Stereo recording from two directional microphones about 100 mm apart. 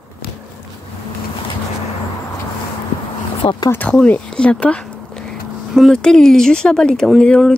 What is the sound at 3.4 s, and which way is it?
Speech, 60° left (ahead or behind).